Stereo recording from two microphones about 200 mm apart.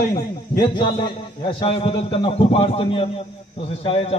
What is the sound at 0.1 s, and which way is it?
A man's voice, 20° left (ahead or behind).